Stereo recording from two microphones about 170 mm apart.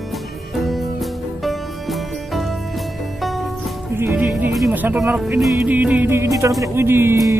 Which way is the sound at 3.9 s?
10° right (ahead or behind).